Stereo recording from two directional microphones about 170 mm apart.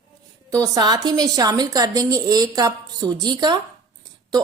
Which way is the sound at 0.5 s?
20° right (ahead or behind).